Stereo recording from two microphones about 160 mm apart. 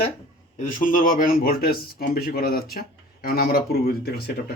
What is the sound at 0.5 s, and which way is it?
Speech, 55° left (ahead or behind).